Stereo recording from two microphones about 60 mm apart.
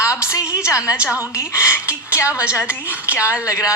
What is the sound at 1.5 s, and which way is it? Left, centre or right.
Speech, left.